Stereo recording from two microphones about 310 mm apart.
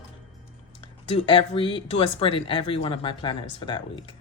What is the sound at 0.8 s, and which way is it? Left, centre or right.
Speech, centre.